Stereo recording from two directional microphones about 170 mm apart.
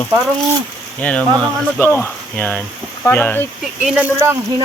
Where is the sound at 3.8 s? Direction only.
10° right (ahead or behind).